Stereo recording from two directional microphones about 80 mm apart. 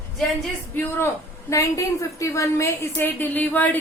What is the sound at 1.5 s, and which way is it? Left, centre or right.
A woman's voice, left.